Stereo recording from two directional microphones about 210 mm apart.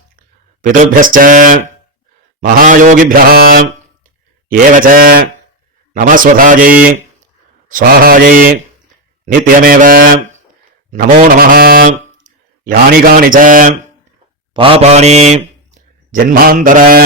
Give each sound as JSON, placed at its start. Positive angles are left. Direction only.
{"t": 0.6, "sound": "mantra", "side_deg": -40}
{"t": 4.8, "sound": "a man's voice", "side_deg": -45}
{"t": 5.9, "sound": "mantra", "side_deg": -40}
{"t": 9.2, "sound": "a man's voice", "side_deg": -40}
{"t": 14.5, "sound": "mantra", "side_deg": -25}
{"t": 16.1, "sound": "a man's voice", "side_deg": -45}